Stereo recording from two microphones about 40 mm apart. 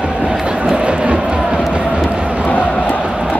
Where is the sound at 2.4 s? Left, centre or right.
Left.